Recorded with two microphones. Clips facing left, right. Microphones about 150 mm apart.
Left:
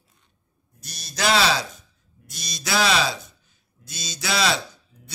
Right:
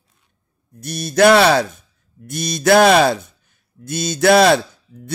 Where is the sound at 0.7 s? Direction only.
55° right (ahead or behind).